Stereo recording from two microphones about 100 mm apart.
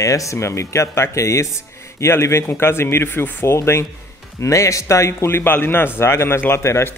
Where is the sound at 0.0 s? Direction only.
30° left (ahead or behind).